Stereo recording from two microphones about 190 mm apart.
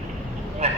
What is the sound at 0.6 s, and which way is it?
Vehicle, 35° right (ahead or behind).